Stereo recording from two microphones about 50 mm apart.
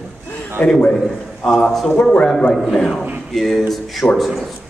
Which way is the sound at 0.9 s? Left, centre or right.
Centre.